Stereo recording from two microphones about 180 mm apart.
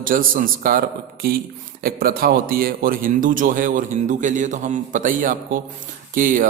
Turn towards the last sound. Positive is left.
turn(degrees=-50)  # may be behind; listen again after turning